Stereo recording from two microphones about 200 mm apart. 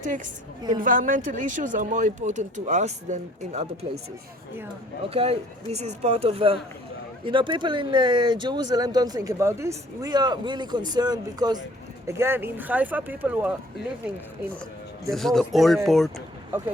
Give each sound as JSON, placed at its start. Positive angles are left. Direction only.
{"t": 0.8, "sound": "speech", "side_deg": -40}
{"t": 5.1, "sound": "speech", "side_deg": -30}
{"t": 15.1, "sound": "speech", "side_deg": 0}